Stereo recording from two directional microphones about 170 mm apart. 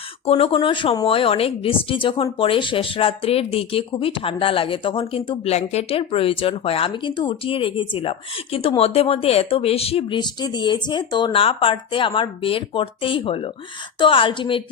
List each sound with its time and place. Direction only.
0.3 s a woman's voice: 35° left (ahead or behind)